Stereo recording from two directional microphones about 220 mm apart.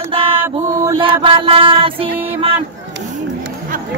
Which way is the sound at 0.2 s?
25° right (ahead or behind).